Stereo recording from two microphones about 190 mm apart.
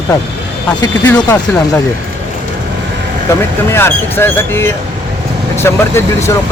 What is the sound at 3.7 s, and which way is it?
Speech, 10° left (ahead or behind).